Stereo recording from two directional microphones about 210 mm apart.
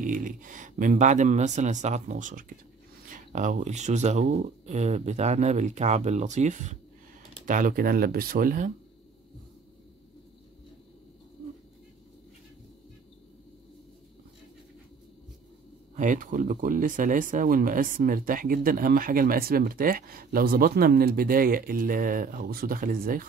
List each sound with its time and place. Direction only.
0.0 s speech: 40° right (ahead or behind)
16.0 s speech: 40° right (ahead or behind)